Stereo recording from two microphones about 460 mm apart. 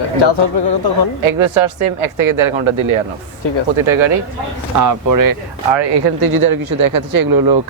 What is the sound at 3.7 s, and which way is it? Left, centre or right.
Speech, right.